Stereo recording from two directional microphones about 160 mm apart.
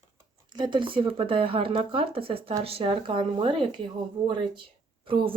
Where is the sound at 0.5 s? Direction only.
30° right (ahead or behind).